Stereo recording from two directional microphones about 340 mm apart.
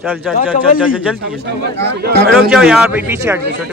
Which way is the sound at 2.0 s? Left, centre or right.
Right.